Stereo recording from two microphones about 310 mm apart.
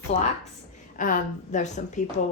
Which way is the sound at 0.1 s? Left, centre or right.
Left.